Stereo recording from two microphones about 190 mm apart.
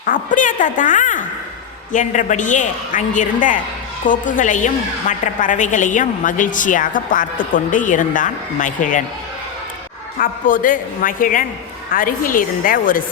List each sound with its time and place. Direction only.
0.0 s a woman's voice: 45° left (ahead or behind)
10.2 s a woman's voice: 45° left (ahead or behind)